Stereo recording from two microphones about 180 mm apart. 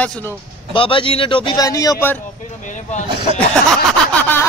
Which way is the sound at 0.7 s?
30° left (ahead or behind).